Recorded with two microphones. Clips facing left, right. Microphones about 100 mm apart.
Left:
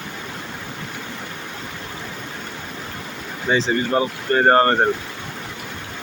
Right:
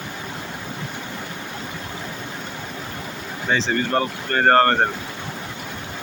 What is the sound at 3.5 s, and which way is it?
Speech, 10° left (ahead or behind).